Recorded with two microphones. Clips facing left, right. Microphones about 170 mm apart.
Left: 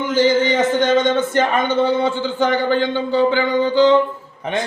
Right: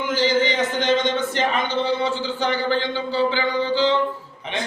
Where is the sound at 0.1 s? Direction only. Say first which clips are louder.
Left 5 dB; 50° left (ahead or behind).